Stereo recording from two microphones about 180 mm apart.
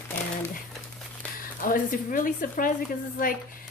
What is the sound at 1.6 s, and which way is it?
A woman's voice, 50° left (ahead or behind).